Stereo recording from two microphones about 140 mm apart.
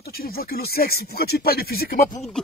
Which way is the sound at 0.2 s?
90° left.